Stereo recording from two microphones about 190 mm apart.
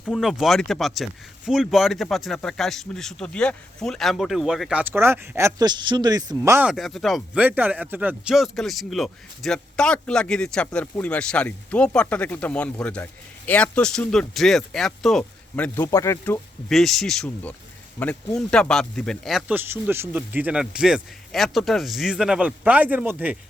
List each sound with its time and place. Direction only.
0.0 s speech: centre (ahead or behind)